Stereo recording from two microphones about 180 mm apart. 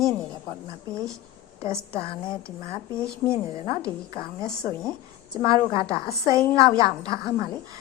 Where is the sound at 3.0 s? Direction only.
5° left (ahead or behind).